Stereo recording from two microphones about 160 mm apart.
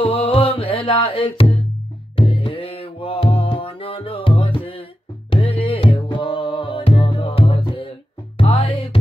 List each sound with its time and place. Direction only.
0.0 s music: 35° left (ahead or behind)